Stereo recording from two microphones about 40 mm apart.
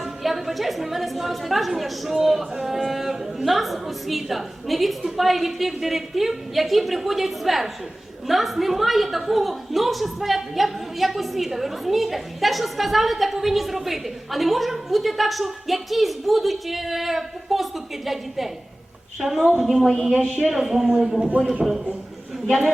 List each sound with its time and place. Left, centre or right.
0.0 s a woman's voice: centre
20.2 s speech: right
20.6 s speech: centre